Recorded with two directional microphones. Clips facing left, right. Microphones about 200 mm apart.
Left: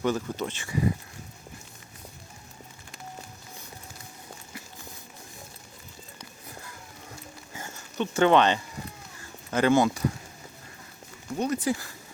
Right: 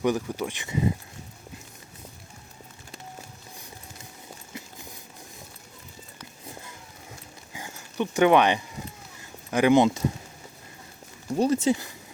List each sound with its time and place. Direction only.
0.0 s speech: 10° right (ahead or behind)
7.5 s a sound: 10° right (ahead or behind)
9.5 s speech: 15° right (ahead or behind)
11.3 s speech: 30° right (ahead or behind)